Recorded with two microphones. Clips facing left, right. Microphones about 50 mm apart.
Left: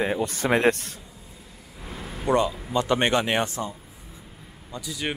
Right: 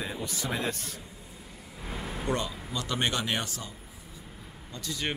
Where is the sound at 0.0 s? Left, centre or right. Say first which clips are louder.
Left 10 dB; left.